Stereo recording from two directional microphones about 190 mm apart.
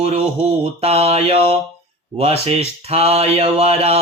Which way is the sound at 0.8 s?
35° right (ahead or behind).